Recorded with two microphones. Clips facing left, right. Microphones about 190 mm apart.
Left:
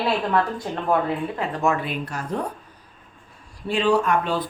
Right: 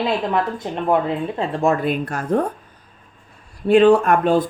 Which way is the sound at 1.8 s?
50° right (ahead or behind).